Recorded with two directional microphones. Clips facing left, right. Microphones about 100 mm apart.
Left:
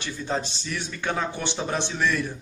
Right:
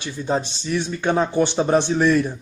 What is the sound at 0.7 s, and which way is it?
Speech, 30° right (ahead or behind).